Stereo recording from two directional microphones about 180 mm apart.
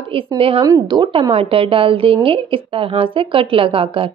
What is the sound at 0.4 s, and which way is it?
A woman's voice, 30° right (ahead or behind).